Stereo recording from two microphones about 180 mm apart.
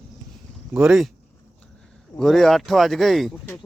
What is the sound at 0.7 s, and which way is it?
Speech, 5° right (ahead or behind).